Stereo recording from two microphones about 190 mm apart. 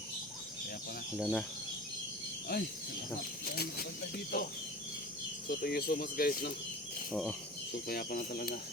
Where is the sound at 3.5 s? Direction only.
55° left (ahead or behind).